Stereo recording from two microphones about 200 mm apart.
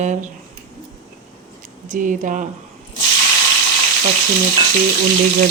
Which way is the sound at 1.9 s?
40° right (ahead or behind).